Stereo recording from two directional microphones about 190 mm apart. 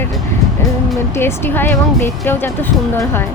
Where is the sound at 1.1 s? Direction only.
10° left (ahead or behind).